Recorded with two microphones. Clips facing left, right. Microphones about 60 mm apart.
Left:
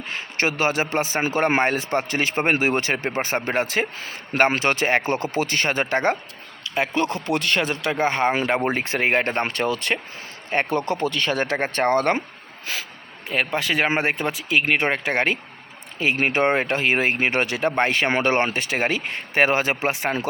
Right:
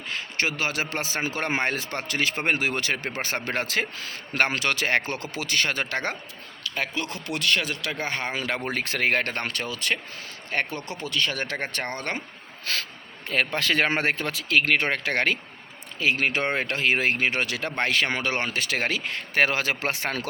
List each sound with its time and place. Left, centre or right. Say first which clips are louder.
0.1 s a man's voice: left 3 dB; left
12.7 s a man's voice: even; centre